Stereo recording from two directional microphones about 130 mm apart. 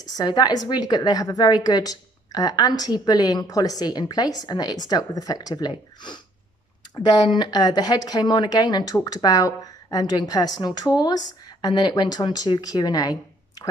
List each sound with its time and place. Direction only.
0.1 s a woman's voice: 35° left (ahead or behind)